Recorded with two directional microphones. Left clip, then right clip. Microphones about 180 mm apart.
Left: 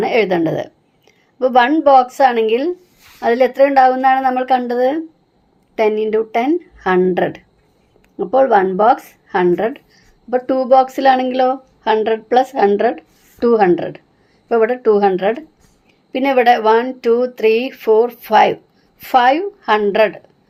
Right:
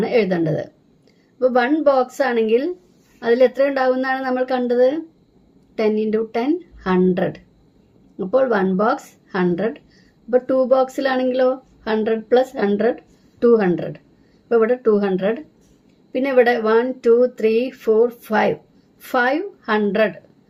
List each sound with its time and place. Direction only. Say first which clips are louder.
0.0 s a woman's voice: left 4 dB; 35° left (ahead or behind)